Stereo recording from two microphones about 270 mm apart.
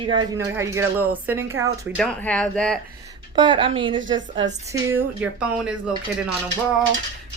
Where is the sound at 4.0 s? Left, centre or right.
Right.